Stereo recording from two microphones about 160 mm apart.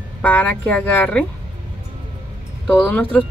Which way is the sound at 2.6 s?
10° left (ahead or behind).